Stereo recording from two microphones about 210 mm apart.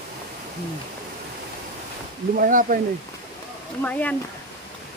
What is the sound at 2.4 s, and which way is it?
Speech, 40° right (ahead or behind).